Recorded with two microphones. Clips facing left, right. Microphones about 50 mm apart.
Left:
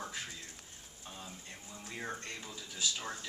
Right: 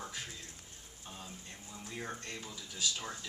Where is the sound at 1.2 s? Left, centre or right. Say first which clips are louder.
Even; centre.